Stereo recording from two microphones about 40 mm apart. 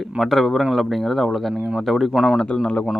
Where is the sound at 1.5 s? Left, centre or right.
Right.